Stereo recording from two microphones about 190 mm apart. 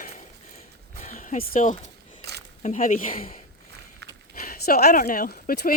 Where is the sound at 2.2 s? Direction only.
60° right (ahead or behind).